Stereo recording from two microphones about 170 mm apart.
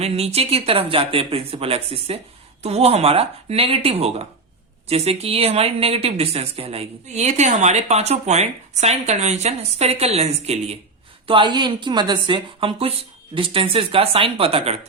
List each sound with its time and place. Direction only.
0.0 s speech: 35° right (ahead or behind)
11.3 s a woman's voice: 30° right (ahead or behind)